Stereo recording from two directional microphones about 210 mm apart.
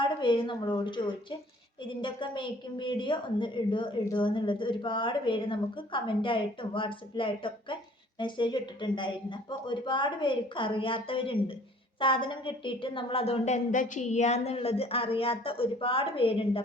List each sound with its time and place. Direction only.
0.0 s a woman's voice: 25° left (ahead or behind)